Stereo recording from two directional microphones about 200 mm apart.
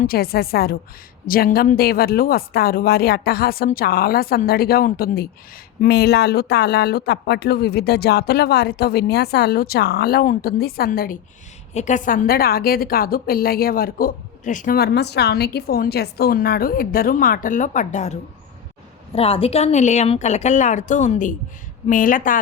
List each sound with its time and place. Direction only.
0.0 s a woman's voice: 50° left (ahead or behind)
11.7 s a woman's voice: 35° left (ahead or behind)